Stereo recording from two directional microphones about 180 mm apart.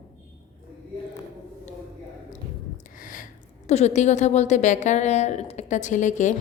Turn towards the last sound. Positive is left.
turn(degrees=40)  # may be behind; listen again after turning